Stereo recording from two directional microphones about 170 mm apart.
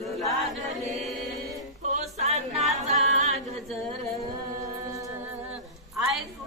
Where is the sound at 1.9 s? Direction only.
40° right (ahead or behind).